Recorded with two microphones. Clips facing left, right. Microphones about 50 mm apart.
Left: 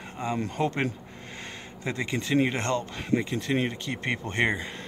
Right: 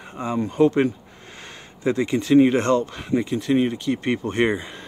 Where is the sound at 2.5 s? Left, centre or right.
Right.